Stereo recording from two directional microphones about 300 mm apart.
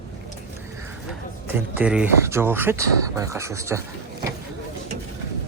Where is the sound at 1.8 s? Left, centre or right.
Centre.